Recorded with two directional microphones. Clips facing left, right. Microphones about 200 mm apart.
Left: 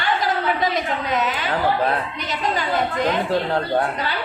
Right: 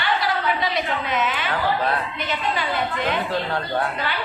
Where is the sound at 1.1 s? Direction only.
35° left (ahead or behind).